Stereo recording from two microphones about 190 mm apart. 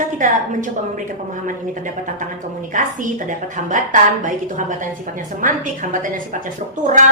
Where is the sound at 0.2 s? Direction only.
45° right (ahead or behind).